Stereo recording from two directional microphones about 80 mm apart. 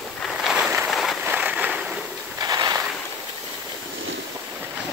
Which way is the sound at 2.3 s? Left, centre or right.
Right.